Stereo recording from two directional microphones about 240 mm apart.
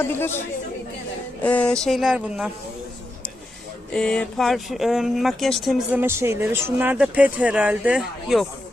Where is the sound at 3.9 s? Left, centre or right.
Centre.